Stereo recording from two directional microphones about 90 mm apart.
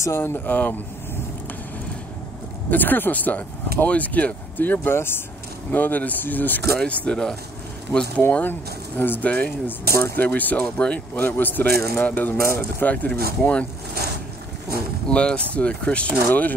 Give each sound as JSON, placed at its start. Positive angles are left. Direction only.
{"t": 0.0, "sound": "speech", "side_deg": 25}
{"t": 2.7, "sound": "speech", "side_deg": 20}
{"t": 8.2, "sound": "speech", "side_deg": 20}
{"t": 15.0, "sound": "speech", "side_deg": 10}